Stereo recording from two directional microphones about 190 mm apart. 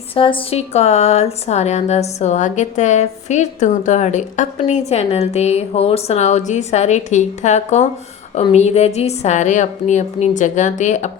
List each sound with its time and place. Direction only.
0.1 s a woman's voice: 30° left (ahead or behind)